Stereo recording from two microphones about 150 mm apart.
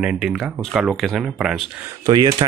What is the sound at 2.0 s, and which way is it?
Speech, 25° right (ahead or behind).